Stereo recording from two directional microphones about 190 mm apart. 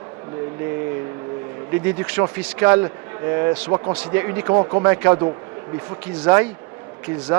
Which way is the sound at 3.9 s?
10° right (ahead or behind).